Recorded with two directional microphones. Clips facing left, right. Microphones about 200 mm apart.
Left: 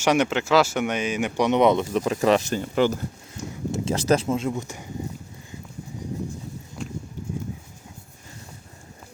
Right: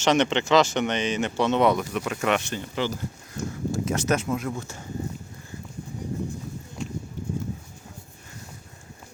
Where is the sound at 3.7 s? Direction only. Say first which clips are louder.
Left 4 dB; 30° left (ahead or behind).